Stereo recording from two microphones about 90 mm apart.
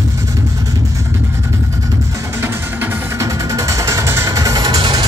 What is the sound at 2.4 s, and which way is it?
Music, 30° right (ahead or behind).